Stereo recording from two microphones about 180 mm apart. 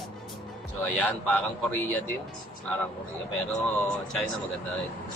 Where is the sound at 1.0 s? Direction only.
5° left (ahead or behind).